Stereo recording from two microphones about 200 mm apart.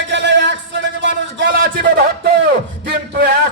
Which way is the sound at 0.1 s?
60° right (ahead or behind).